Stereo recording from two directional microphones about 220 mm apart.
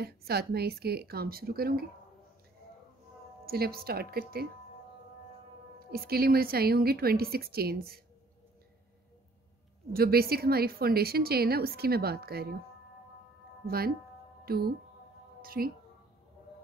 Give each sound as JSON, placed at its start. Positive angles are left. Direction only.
{"t": 0.0, "sound": "a woman's voice", "side_deg": -45}
{"t": 3.4, "sound": "a woman's voice", "side_deg": -45}
{"t": 5.8, "sound": "a woman's voice", "side_deg": -45}
{"t": 9.9, "sound": "a woman's voice", "side_deg": -45}
{"t": 13.7, "sound": "a woman's voice", "side_deg": -45}
{"t": 14.4, "sound": "music", "side_deg": -45}
{"t": 15.4, "sound": "a woman's voice", "side_deg": -40}